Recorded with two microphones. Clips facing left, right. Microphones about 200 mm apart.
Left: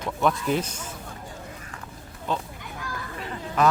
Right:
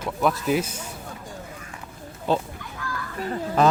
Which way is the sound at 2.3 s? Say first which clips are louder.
Right 6 dB; 35° right (ahead or behind).